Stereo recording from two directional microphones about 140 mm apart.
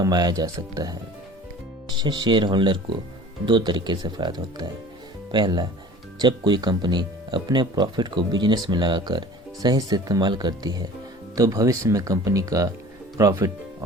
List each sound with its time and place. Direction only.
0.0 s speech: 30° right (ahead or behind)
2.0 s speech: 30° right (ahead or behind)